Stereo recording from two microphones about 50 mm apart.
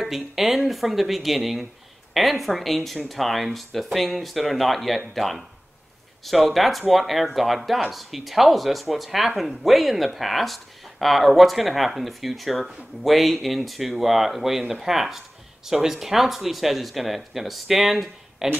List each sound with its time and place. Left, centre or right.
0.0 s speech: centre
6.5 s speech: centre